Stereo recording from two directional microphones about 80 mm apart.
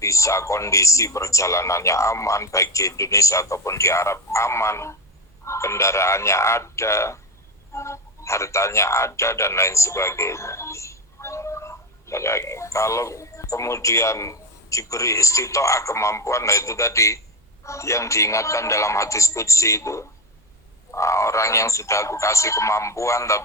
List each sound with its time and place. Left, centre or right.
0.0 s speech: left